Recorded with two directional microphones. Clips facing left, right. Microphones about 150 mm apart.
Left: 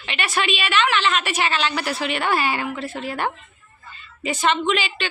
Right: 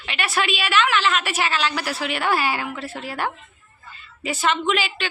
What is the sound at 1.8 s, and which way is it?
A woman's voice, 5° right (ahead or behind).